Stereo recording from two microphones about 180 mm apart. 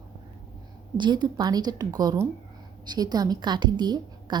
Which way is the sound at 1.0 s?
25° right (ahead or behind).